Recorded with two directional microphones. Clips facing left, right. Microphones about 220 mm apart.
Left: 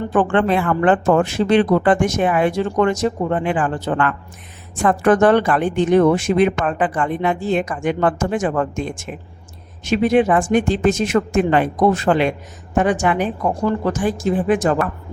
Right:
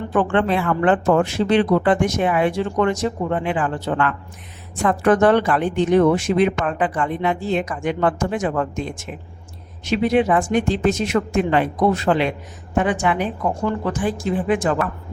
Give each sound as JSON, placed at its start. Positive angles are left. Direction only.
{"t": 0.1, "sound": "speech", "side_deg": 50}